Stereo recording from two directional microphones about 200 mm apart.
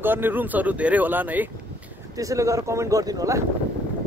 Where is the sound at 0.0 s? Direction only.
10° right (ahead or behind).